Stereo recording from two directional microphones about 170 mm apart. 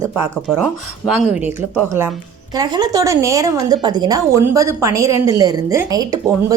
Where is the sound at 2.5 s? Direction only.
25° right (ahead or behind).